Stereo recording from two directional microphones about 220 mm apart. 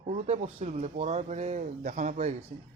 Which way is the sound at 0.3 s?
30° right (ahead or behind).